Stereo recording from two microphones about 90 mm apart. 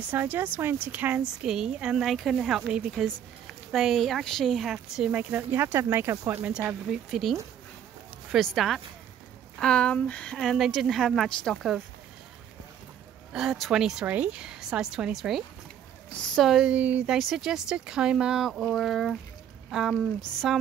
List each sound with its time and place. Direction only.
0.1 s speech: 20° right (ahead or behind)
1.2 s a woman's voice: 5° right (ahead or behind)
2.0 s speech: centre (ahead or behind)
5.1 s speech: 20° right (ahead or behind)
6.9 s speech: 5° right (ahead or behind); by 10.3 s 15° left (ahead or behind)
10.3 s speech: centre (ahead or behind)
13.3 s a woman's voice: 5° right (ahead or behind)
16.7 s a woman's voice: 15° right (ahead or behind)
17.2 s speech: centre (ahead or behind)